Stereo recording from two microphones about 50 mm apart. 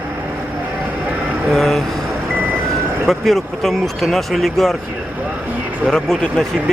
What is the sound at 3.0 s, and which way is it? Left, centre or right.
Speech, centre.